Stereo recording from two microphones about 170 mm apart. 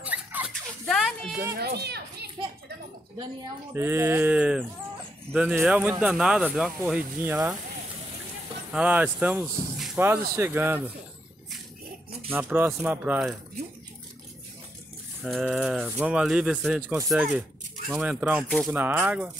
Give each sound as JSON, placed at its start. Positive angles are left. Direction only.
{"t": 0.0, "sound": "a sound", "side_deg": -10}
{"t": 0.8, "sound": "a sound", "side_deg": 0}
{"t": 1.6, "sound": "a child's voice", "side_deg": -70}
{"t": 3.7, "sound": "speech", "side_deg": -15}
{"t": 8.7, "sound": "speech", "side_deg": -10}
{"t": 12.3, "sound": "speech", "side_deg": -10}
{"t": 15.2, "sound": "speech", "side_deg": 0}